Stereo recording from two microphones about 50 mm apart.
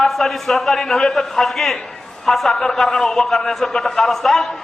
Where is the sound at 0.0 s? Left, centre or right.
Centre.